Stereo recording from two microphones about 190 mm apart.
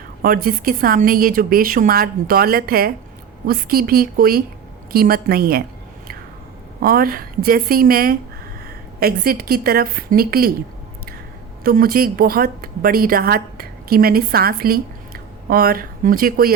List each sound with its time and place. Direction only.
0.2 s a woman's voice: 50° right (ahead or behind)
6.7 s a woman's voice: 50° right (ahead or behind)
11.6 s a woman's voice: 50° right (ahead or behind)